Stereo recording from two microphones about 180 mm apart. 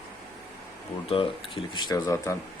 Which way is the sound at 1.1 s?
30° left (ahead or behind).